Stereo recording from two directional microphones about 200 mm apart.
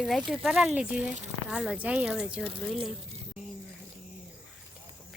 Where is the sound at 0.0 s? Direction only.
Centre (ahead or behind).